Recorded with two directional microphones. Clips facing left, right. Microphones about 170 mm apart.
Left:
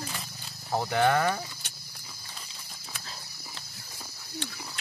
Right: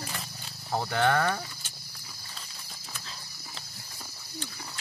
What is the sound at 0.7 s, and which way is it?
Speech, 15° left (ahead or behind).